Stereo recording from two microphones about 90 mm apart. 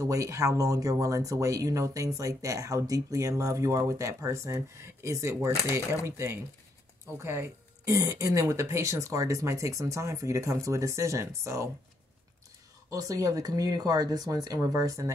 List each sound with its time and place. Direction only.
0.0 s speech: 35° right (ahead or behind)
12.9 s speech: 40° right (ahead or behind)